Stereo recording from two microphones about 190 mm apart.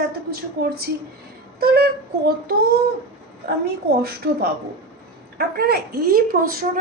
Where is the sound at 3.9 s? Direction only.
55° right (ahead or behind).